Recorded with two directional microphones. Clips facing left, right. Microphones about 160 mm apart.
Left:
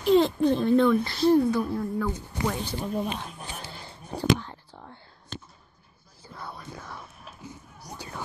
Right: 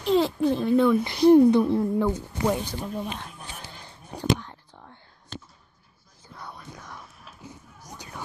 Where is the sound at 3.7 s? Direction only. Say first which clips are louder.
Left 3 dB; 10° left (ahead or behind).